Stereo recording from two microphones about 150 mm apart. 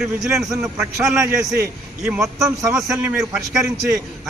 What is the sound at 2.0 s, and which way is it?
A man's voice, centre (ahead or behind).